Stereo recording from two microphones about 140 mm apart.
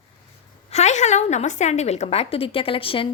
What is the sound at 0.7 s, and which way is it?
A woman's voice, 55° left (ahead or behind).